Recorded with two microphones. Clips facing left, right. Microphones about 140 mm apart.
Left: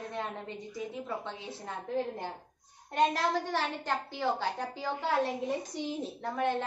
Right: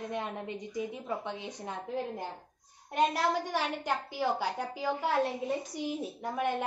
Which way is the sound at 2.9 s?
10° right (ahead or behind).